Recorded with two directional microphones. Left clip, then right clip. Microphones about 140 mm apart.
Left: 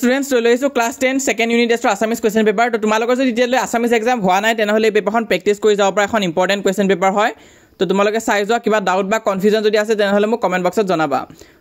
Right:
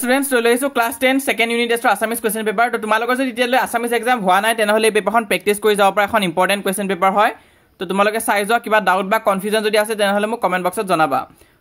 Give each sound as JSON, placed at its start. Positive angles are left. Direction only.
{"t": 0.0, "sound": "speech", "side_deg": 30}